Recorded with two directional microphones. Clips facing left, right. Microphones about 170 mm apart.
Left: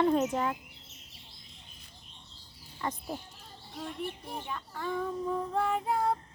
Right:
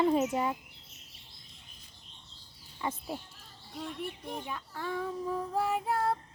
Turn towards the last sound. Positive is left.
turn(degrees=-5)  # may be behind; listen again after turning